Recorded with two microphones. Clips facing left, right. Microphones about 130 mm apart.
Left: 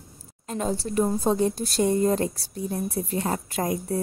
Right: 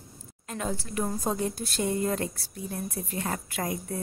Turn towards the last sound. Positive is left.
turn(degrees=35)  # may be behind; listen again after turning